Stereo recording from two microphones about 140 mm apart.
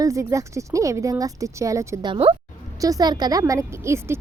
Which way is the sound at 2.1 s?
40° right (ahead or behind).